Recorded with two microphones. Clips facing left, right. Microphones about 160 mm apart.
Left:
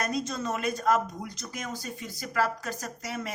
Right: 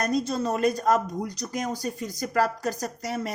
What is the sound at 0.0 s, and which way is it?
Speech, 35° right (ahead or behind).